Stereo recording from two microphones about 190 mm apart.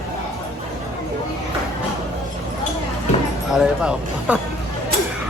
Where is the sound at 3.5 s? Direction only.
5° right (ahead or behind).